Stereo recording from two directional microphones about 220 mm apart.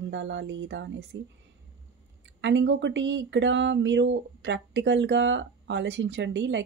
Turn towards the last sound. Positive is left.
turn(degrees=-55)  # may be behind; listen again after turning